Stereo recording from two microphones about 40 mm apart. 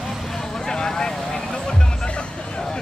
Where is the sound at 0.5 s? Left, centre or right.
Centre.